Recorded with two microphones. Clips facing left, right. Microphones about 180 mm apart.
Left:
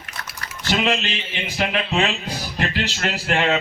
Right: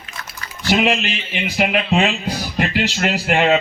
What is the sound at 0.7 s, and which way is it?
A man's voice, 15° right (ahead or behind).